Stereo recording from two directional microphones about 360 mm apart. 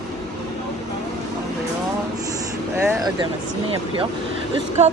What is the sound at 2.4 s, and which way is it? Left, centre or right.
Speech, centre.